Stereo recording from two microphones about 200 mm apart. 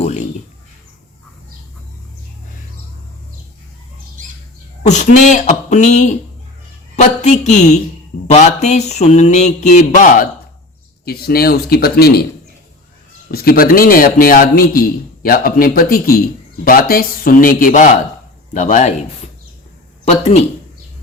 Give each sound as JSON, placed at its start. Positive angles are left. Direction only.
{"t": 0.0, "sound": "a sound", "side_deg": 35}
{"t": 4.9, "sound": "mantra", "side_deg": 35}
{"t": 11.0, "sound": "a man's voice", "side_deg": 50}
{"t": 13.3, "sound": "a man's voice", "side_deg": 50}
{"t": 18.5, "sound": "mantra", "side_deg": 35}
{"t": 20.1, "sound": "mantra", "side_deg": 30}